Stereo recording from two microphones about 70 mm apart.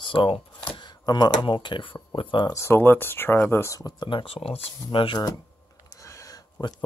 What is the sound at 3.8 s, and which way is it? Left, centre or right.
Speech, left.